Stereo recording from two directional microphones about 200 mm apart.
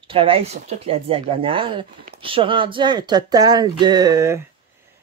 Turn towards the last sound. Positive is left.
turn(degrees=-15)  # may be behind; listen again after turning